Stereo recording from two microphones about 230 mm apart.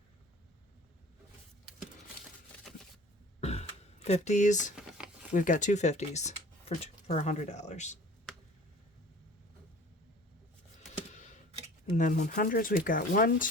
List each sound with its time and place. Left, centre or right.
3.4 s throat clearing: left
4.7 s a sound: centre
5.3 s speech: left
11.9 s speech: left